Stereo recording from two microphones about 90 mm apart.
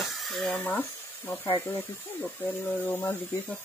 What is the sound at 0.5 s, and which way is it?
Speech, 20° left (ahead or behind).